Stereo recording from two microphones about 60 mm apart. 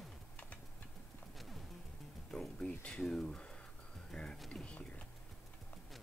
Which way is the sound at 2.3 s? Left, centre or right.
Centre.